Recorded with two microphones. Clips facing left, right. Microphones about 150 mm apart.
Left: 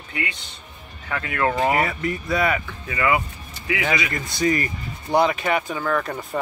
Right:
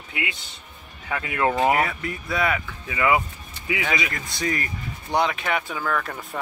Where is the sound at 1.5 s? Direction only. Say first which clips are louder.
Right 1 dB; centre (ahead or behind).